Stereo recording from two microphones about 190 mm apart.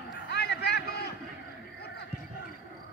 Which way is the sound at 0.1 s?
65° left (ahead or behind).